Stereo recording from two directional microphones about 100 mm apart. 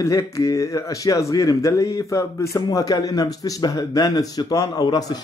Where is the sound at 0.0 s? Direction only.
30° left (ahead or behind).